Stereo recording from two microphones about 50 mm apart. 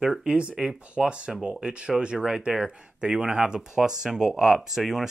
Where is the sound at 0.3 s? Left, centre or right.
Right.